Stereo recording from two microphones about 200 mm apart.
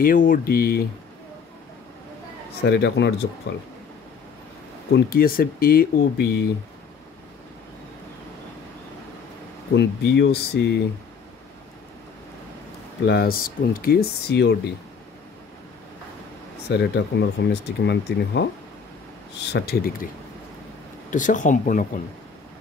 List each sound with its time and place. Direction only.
0.0 s speech: 45° left (ahead or behind)
2.6 s speech: 60° left (ahead or behind)
4.9 s speech: 45° left (ahead or behind)
9.8 s speech: 60° left (ahead or behind)
13.0 s speech: 55° left (ahead or behind)
16.6 s speech: 55° left (ahead or behind)
21.1 s speech: 40° left (ahead or behind)